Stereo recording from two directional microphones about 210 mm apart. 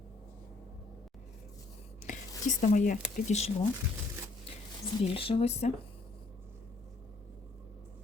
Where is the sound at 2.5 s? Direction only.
35° left (ahead or behind).